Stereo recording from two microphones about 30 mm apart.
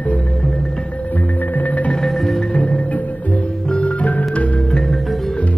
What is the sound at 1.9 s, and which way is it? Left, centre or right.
Music, centre.